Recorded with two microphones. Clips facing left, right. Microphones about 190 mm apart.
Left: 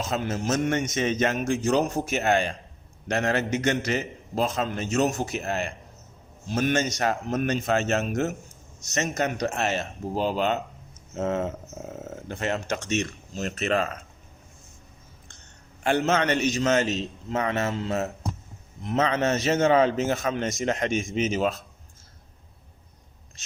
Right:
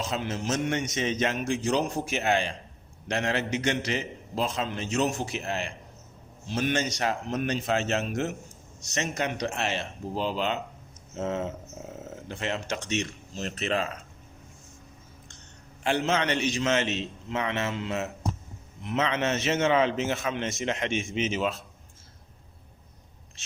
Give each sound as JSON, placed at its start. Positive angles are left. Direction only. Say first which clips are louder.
{"t": 0.0, "sound": "a man's voice", "louder": "left 3 dB", "side_deg": 45}
{"t": 15.8, "sound": "a man's voice", "louder": "left 3 dB", "side_deg": 45}